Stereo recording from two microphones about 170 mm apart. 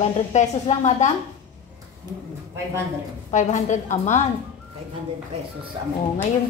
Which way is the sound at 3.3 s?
45° left (ahead or behind).